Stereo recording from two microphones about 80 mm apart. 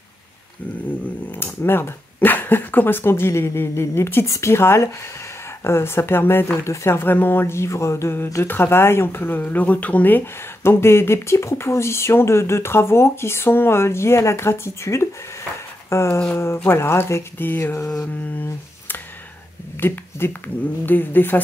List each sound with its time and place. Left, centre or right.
1.4 s speech: left